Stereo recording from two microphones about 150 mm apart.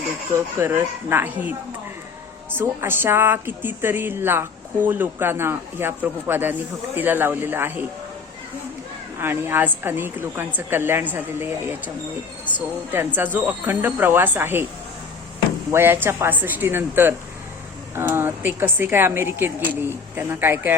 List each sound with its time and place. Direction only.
0.6 s a woman's voice: 15° right (ahead or behind)
2.6 s a woman's voice: 15° right (ahead or behind)
9.1 s a woman's voice: 15° right (ahead or behind)
15.7 s a woman's voice: 15° right (ahead or behind)